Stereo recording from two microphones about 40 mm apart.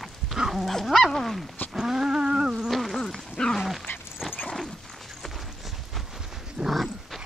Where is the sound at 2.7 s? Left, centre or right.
Centre.